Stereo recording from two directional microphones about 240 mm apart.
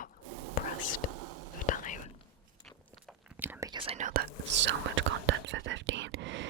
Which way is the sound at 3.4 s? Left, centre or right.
Centre.